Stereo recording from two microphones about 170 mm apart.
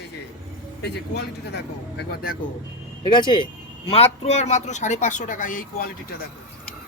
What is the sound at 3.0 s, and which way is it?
Speech, 25° left (ahead or behind).